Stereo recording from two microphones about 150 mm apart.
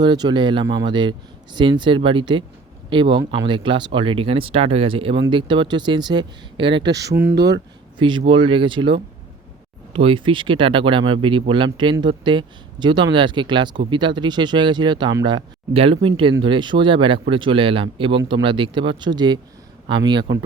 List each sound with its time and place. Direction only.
0.0 s speech: 30° right (ahead or behind)
7.9 s speech: 30° right (ahead or behind)